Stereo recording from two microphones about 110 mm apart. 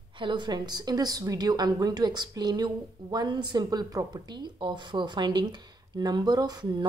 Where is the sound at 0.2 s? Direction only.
45° right (ahead or behind).